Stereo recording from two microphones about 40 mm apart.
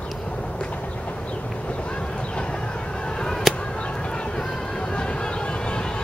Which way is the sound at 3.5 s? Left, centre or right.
Centre.